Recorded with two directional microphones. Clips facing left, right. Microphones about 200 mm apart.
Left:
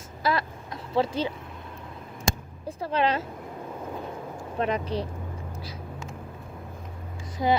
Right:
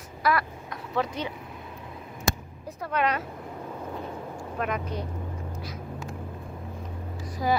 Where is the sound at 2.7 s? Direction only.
30° left (ahead or behind).